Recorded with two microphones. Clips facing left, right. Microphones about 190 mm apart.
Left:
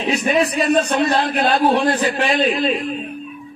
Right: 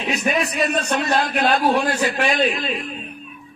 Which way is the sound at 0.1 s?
30° left (ahead or behind).